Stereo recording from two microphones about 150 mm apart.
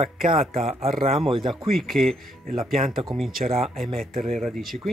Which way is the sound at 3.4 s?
50° right (ahead or behind).